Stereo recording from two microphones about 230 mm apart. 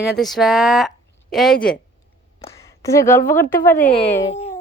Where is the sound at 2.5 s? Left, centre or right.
Centre.